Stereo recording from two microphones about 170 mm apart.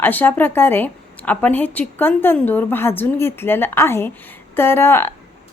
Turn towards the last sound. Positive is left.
turn(degrees=15)  # may be behind; listen again after turning